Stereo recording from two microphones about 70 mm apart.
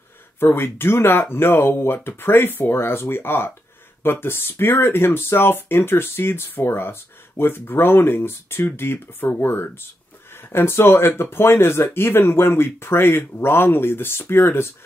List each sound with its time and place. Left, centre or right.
0.4 s speech: left